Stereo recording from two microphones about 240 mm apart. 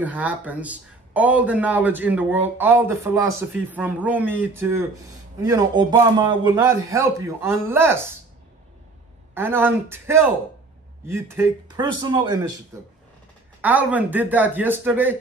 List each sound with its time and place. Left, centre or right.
0.0 s speech: centre
9.3 s speech: centre